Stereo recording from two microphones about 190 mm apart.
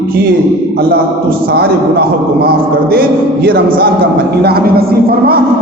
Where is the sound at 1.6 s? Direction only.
55° right (ahead or behind).